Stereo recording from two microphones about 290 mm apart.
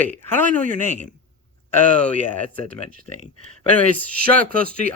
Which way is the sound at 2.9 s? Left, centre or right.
Left.